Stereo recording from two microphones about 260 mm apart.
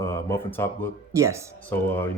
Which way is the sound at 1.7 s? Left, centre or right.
Centre.